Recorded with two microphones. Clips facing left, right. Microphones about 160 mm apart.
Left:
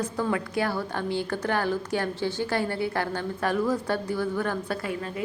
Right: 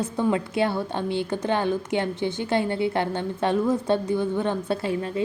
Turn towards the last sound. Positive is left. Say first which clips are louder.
# right 5 dB
turn(degrees=-25)  # may be behind; listen again after turning